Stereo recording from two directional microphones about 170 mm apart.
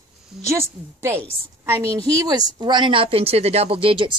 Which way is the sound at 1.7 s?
15° right (ahead or behind).